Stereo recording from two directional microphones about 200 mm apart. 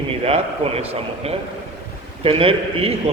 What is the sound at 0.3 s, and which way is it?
A man's voice, 30° right (ahead or behind).